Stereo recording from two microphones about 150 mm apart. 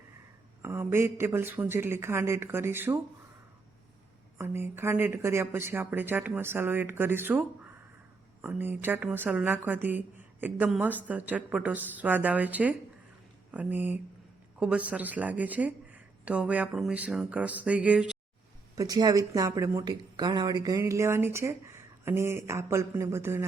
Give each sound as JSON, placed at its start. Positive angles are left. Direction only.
{"t": 0.6, "sound": "speech", "side_deg": -15}
{"t": 4.4, "sound": "speech", "side_deg": -15}
{"t": 18.8, "sound": "speech", "side_deg": -25}